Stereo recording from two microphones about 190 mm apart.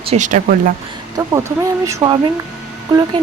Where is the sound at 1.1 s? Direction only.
15° right (ahead or behind).